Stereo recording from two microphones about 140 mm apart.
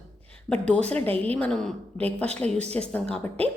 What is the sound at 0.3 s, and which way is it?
A woman's voice, 10° left (ahead or behind).